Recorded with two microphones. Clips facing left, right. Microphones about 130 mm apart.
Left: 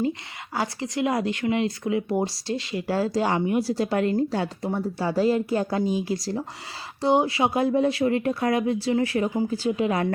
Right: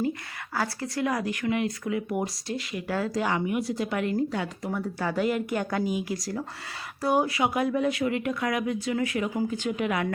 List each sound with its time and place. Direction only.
0.0 s speech: 20° left (ahead or behind)